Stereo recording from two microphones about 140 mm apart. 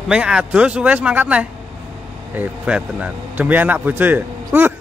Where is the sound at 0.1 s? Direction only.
5° right (ahead or behind).